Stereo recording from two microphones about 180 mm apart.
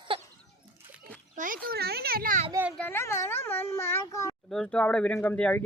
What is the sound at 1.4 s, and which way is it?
A child's voice, 50° right (ahead or behind).